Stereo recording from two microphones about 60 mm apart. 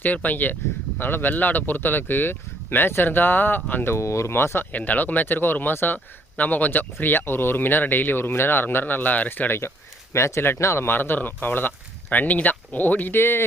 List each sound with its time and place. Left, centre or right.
0.0 s speech: left
3.9 s speech: left
4.7 s speech: left
9.5 s speech: left